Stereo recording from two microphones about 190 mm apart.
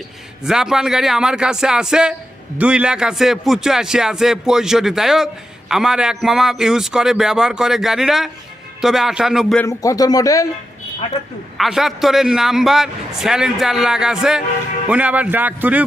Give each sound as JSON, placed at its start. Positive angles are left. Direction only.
{"t": 0.4, "sound": "a man's voice", "side_deg": -5}
{"t": 9.6, "sound": "speech", "side_deg": 15}
{"t": 11.5, "sound": "a man's voice", "side_deg": 0}